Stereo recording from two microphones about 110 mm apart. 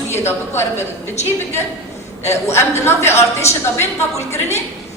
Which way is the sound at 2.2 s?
90° left.